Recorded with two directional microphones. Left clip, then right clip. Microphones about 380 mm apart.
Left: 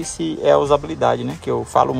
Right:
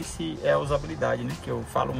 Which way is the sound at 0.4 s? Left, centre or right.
Centre.